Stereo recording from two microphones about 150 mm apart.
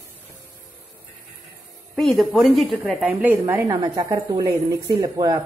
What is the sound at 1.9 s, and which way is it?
Speech, centre (ahead or behind).